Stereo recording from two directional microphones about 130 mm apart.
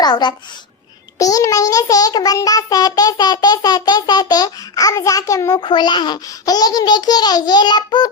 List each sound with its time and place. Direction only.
0.0 s a child's voice: 35° left (ahead or behind)
1.2 s child singing: 25° left (ahead or behind)
5.6 s a child's voice: 35° left (ahead or behind)